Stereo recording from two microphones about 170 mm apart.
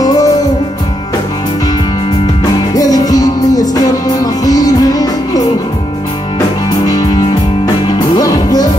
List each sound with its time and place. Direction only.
0.0 s music: 20° left (ahead or behind)
2.7 s music: 20° left (ahead or behind)
6.7 s music: 20° left (ahead or behind)